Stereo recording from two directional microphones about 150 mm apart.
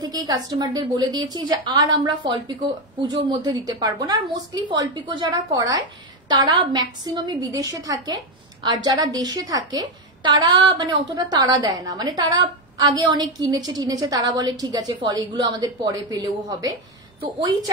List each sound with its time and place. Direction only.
0.0 s a woman's voice: 25° right (ahead or behind)